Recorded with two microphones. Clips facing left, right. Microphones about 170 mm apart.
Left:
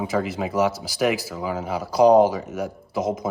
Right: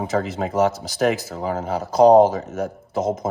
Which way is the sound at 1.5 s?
50° right (ahead or behind).